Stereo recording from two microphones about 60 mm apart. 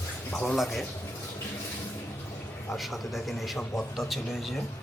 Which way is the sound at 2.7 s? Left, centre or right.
Centre.